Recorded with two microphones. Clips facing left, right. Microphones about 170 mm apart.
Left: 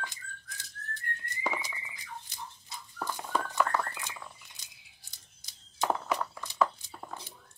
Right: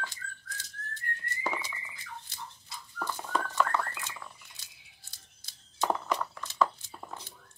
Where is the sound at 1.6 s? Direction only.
15° left (ahead or behind).